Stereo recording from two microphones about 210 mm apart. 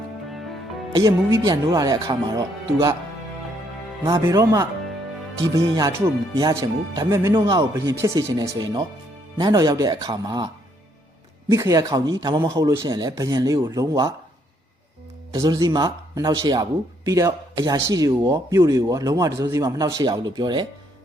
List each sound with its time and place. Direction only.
0.9 s speech: 20° right (ahead or behind)
4.0 s speech: 15° right (ahead or behind)
15.3 s speech: 20° right (ahead or behind)